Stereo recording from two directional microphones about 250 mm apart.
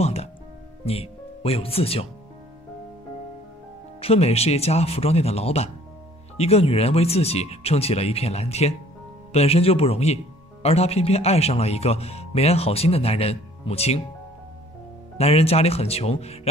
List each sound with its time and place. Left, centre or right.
0.0 s music: left
0.8 s speech: left
4.0 s speech: left
15.1 s speech: left